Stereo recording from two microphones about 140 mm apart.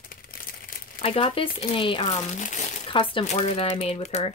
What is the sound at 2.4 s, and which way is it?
Speech, 60° left (ahead or behind).